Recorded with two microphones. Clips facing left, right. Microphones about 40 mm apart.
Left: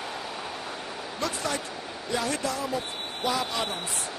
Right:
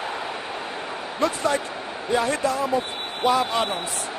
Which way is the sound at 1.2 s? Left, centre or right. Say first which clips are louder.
Right 8 dB; right.